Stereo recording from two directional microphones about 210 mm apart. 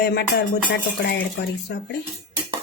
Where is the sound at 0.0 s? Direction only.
50° left (ahead or behind).